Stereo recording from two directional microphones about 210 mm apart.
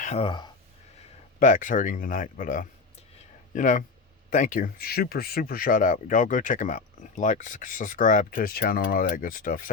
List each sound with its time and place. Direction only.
0.0 s speech: 30° left (ahead or behind)
1.4 s speech: 35° left (ahead or behind)